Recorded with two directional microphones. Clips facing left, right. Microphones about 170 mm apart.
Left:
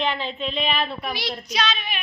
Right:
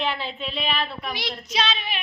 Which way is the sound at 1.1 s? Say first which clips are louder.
Left 2 dB; 20° right (ahead or behind).